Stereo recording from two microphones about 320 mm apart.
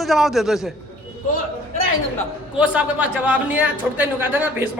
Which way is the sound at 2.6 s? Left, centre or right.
Centre.